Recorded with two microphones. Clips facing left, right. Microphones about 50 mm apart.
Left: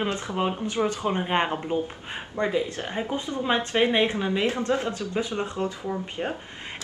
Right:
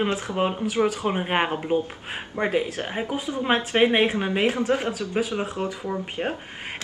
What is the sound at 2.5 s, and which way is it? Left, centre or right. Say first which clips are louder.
Speech: right 2 dB; right.